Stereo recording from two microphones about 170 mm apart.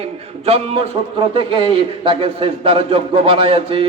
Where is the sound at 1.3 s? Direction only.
30° right (ahead or behind).